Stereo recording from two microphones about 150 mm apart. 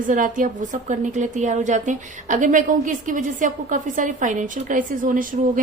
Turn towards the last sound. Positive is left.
turn(degrees=-65)  # may be behind; listen again after turning